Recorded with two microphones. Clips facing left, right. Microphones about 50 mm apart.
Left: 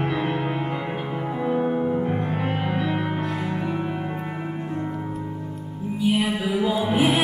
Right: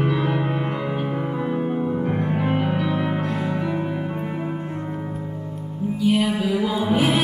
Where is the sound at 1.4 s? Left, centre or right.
Centre.